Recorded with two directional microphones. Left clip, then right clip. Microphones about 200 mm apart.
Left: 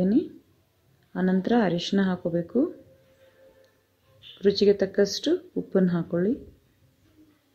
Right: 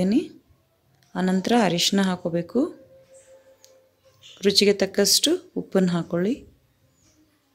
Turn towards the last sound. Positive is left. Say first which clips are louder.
# right 1 dB
turn(degrees=-25)  # may be behind; listen again after turning